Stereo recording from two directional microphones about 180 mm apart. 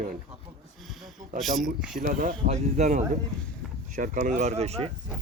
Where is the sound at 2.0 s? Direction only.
50° right (ahead or behind).